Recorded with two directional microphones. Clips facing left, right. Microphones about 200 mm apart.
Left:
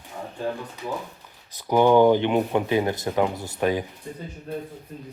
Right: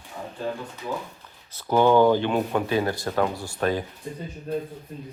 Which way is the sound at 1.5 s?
15° left (ahead or behind).